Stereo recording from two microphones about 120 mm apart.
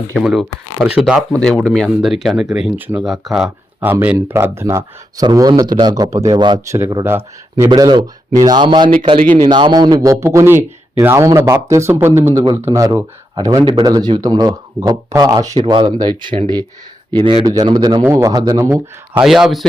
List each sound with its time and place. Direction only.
0.2 s speech: 5° right (ahead or behind)
1.3 s speech: 5° left (ahead or behind)
4.0 s speech: 15° right (ahead or behind); by 6.6 s 35° right (ahead or behind)
6.7 s speech: 20° right (ahead or behind)
7.7 s a man's voice: 40° right (ahead or behind)
10.2 s speech: 20° right (ahead or behind)
12.3 s speech: 30° right (ahead or behind)
17.4 s speech: 30° right (ahead or behind)
18.6 s speech: 20° right (ahead or behind)
19.2 s speech: centre (ahead or behind)